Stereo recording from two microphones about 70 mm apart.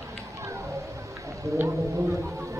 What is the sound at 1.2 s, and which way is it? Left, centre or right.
Music, right.